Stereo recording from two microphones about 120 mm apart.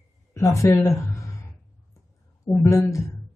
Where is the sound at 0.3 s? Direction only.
25° left (ahead or behind).